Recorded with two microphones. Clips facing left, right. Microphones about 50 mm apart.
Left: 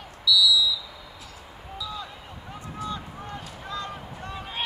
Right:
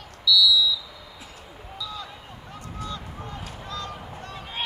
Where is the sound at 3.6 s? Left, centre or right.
Left.